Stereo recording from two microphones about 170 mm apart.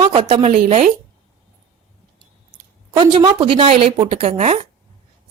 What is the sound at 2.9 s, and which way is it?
Speech, 25° right (ahead or behind).